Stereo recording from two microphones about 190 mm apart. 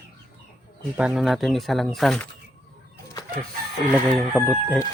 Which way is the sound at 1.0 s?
5° right (ahead or behind).